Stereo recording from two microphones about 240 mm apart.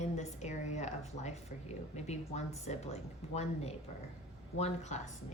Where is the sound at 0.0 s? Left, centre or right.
Left.